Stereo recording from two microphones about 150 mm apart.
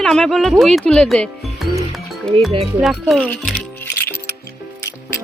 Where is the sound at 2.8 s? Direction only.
Centre (ahead or behind).